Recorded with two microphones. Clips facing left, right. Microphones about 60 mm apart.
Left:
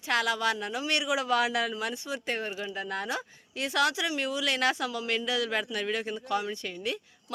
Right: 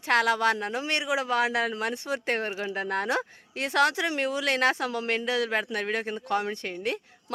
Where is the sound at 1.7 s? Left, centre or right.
Right.